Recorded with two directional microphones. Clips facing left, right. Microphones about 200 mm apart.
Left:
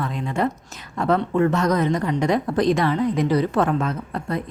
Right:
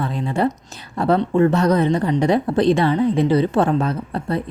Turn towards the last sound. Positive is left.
turn(degrees=-30)  # may be behind; listen again after turning